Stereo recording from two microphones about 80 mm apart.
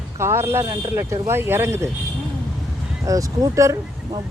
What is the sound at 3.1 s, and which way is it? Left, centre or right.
Speech, right.